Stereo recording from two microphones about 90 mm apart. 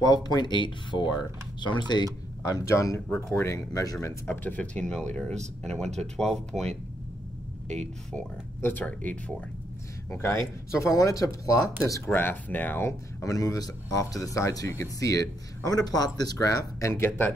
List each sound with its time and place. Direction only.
0.0 s speech: 45° left (ahead or behind)
2.4 s speech: 35° left (ahead or behind)
4.3 s speech: 20° left (ahead or behind)
8.5 s speech: 20° left (ahead or behind)
10.1 s speech: 35° left (ahead or behind)
12.1 s speech: 25° left (ahead or behind)
13.2 s speech: 40° left (ahead or behind)